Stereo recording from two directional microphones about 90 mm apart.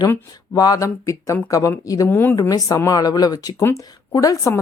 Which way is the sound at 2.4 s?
45° left (ahead or behind).